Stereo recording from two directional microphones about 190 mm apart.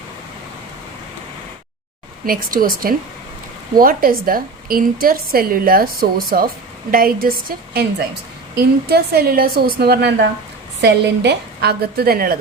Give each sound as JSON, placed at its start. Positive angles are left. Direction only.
{"t": 2.2, "sound": "a woman's voice", "side_deg": -50}